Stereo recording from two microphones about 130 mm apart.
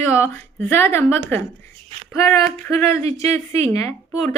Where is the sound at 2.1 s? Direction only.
20° left (ahead or behind).